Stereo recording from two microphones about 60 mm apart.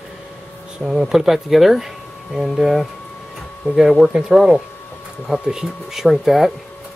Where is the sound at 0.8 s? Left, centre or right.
Centre.